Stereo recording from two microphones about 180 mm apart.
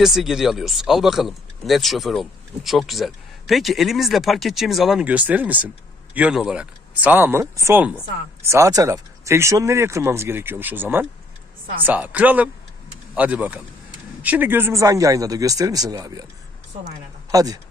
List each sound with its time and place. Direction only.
0.0 s speech: centre (ahead or behind); by 17.6 s 20° right (ahead or behind)